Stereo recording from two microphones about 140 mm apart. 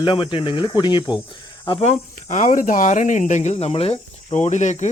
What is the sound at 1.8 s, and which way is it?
Speech, 55° left (ahead or behind).